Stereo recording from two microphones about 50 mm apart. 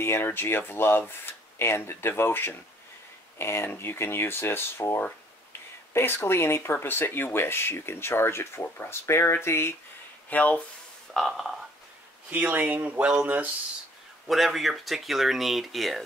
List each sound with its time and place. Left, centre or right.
0.2 s speech: left
5.9 s speech: left
10.3 s speech: left
11.1 s speech: centre
12.3 s speech: right
14.2 s speech: centre